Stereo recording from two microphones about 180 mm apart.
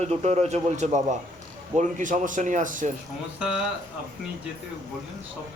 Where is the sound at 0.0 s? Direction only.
35° right (ahead or behind).